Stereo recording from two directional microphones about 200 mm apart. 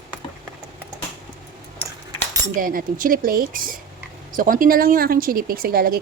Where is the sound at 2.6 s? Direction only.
45° right (ahead or behind).